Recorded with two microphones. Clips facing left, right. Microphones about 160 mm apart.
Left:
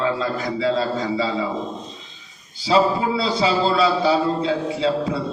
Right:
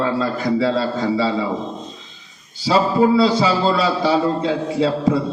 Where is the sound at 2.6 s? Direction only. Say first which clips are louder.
Right 3 dB; 40° right (ahead or behind).